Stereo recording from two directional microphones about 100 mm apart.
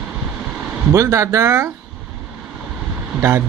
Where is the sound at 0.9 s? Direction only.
30° right (ahead or behind).